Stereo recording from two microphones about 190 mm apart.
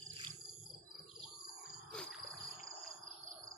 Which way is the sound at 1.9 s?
5° left (ahead or behind).